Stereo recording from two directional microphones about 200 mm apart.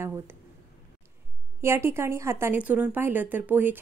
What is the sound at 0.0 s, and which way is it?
Speech, 15° right (ahead or behind).